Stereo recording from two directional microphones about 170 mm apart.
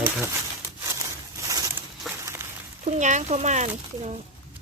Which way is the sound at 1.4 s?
20° right (ahead or behind).